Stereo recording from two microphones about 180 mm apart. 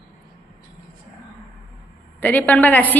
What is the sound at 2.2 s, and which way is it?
Speech, 10° left (ahead or behind).